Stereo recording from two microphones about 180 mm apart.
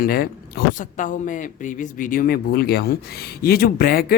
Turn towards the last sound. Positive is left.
turn(degrees=55)  # may be behind; listen again after turning